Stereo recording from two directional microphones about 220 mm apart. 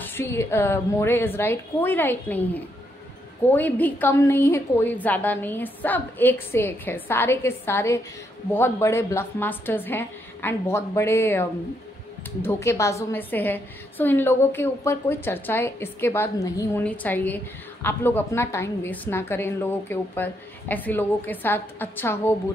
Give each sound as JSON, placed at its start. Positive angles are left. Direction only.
{"t": 0.0, "sound": "a woman's voice", "side_deg": 10}